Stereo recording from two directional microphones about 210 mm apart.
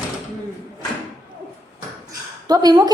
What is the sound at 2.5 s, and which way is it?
Speech, 20° right (ahead or behind).